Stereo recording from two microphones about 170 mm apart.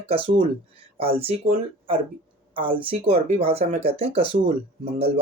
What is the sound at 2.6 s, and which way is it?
Speech, 30° right (ahead or behind).